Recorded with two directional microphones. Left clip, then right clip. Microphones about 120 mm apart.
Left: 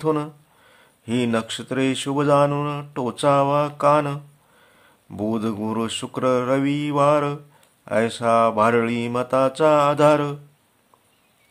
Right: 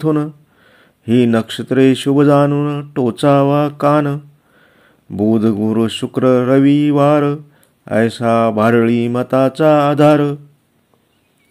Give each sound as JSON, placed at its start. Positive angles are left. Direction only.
{"t": 0.0, "sound": "speech", "side_deg": -30}
{"t": 2.5, "sound": "mantra", "side_deg": -30}
{"t": 5.1, "sound": "speech", "side_deg": -30}